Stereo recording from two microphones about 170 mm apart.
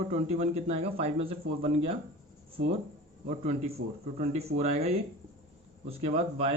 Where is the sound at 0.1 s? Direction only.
40° right (ahead or behind).